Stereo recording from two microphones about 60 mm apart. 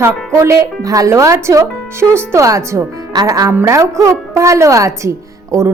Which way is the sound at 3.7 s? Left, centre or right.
Right.